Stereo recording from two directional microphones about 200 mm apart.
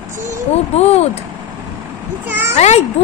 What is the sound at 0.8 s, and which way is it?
Speech, 30° left (ahead or behind).